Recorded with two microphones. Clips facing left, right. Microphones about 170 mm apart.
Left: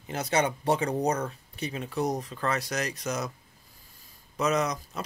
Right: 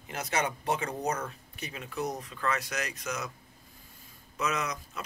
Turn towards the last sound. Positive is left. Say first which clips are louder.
# left 6 dB
turn(degrees=35)  # may be behind; listen again after turning